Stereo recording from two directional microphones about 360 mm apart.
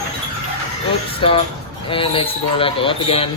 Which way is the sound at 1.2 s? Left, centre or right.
Centre.